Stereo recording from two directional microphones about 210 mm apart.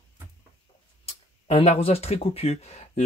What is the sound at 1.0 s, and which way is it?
Speech, 30° left (ahead or behind).